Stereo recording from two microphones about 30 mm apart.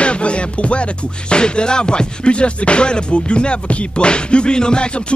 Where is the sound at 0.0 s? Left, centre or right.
Left.